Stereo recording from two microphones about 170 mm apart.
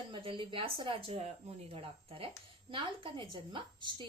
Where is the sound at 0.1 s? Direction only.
30° right (ahead or behind).